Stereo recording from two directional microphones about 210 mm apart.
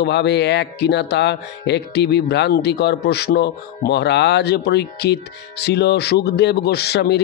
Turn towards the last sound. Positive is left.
turn(degrees=50)  # may be behind; listen again after turning